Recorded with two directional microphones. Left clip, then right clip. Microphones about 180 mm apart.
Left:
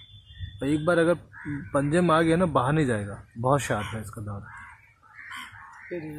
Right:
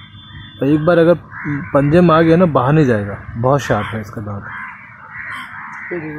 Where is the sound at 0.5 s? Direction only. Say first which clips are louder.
Right 11 dB; 35° right (ahead or behind).